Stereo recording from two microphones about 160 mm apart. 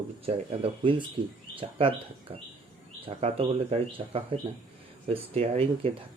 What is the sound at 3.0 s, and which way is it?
Speech, 40° right (ahead or behind).